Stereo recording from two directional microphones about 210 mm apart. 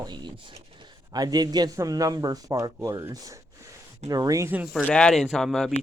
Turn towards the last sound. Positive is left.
turn(degrees=0)  # may be behind; listen again after turning